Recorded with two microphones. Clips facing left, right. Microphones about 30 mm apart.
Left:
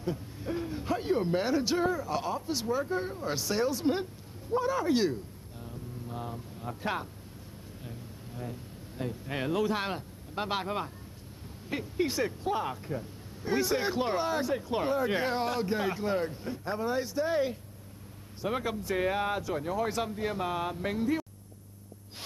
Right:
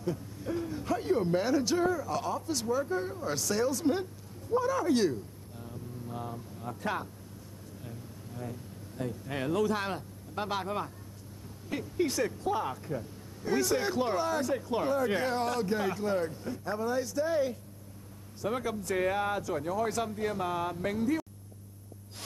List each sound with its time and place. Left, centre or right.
0.0 s speech: left
5.6 s vehicle: centre
8.4 s speech: centre